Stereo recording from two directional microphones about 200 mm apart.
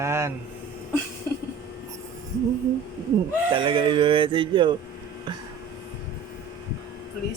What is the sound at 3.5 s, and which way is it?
Speech, 25° right (ahead or behind).